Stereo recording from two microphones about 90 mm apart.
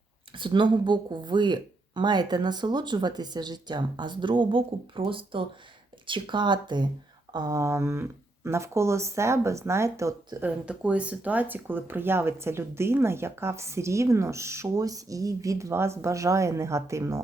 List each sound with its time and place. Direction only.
0.3 s speech: 65° right (ahead or behind)
7.3 s speech: 40° right (ahead or behind)
10.4 s speech: 15° right (ahead or behind); by 17.2 s 35° right (ahead or behind)